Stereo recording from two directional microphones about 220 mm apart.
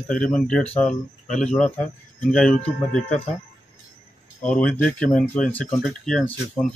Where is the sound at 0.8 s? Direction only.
35° left (ahead or behind).